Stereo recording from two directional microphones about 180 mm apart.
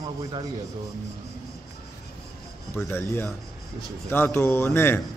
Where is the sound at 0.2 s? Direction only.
20° right (ahead or behind).